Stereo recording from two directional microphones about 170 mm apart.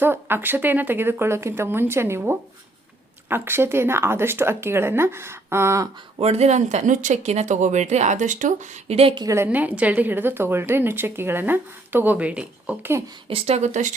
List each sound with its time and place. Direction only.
0.0 s a woman's voice: 15° right (ahead or behind)
6.1 s speech: 35° right (ahead or behind)
9.2 s a woman's voice: 15° right (ahead or behind)
13.2 s speech: 35° right (ahead or behind)